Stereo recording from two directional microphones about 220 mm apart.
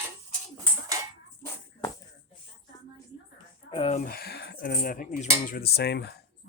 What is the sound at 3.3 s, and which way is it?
Speech, 25° left (ahead or behind).